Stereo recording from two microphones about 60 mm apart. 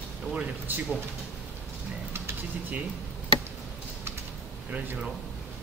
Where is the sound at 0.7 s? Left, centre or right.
Right.